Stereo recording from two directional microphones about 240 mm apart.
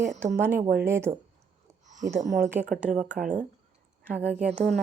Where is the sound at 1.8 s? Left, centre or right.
Right.